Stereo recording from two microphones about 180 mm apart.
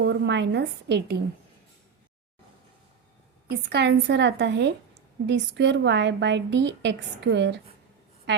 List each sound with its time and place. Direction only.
0.0 s a woman's voice: 75° right (ahead or behind)
3.5 s a woman's voice: 65° right (ahead or behind)